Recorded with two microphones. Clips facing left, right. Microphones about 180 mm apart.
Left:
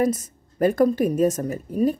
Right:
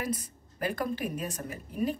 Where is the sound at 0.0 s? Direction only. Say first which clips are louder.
Left 12 dB; 45° left (ahead or behind).